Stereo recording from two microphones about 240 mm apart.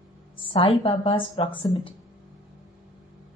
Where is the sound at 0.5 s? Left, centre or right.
Left.